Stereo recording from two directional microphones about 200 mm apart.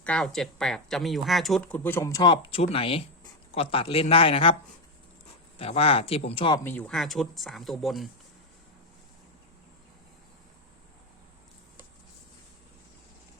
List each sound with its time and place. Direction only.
0.0 s speech: 5° left (ahead or behind); by 4.5 s 30° left (ahead or behind)
5.5 s speech: 30° left (ahead or behind)
6.7 s speech: 5° left (ahead or behind)